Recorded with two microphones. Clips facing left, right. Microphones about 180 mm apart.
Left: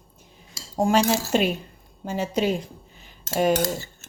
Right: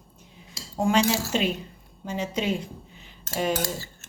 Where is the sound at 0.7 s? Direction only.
40° left (ahead or behind).